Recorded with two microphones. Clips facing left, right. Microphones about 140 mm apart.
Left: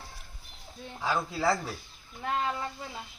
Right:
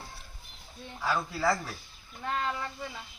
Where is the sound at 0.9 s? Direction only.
20° left (ahead or behind).